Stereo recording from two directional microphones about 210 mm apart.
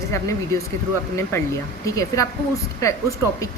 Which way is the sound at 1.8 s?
15° left (ahead or behind).